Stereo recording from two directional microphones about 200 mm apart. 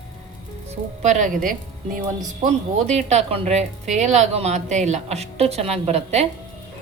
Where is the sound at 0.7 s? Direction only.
35° right (ahead or behind).